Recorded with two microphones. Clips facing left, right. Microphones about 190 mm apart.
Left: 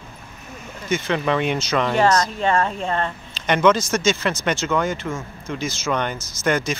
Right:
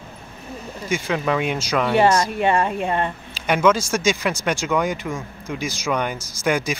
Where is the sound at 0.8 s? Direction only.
10° right (ahead or behind).